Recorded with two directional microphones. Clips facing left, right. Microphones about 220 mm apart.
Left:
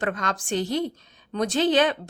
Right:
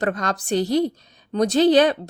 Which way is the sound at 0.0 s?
35° right (ahead or behind).